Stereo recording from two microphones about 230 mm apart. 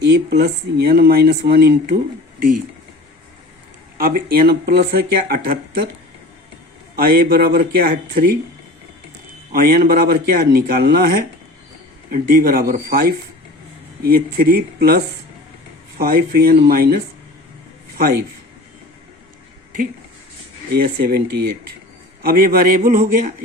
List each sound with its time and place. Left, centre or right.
0.0 s speech: right
3.9 s speech: right
6.9 s speech: right
9.5 s speech: right
20.7 s speech: right